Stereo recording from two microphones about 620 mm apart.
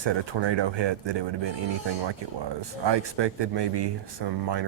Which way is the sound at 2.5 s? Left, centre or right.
Right.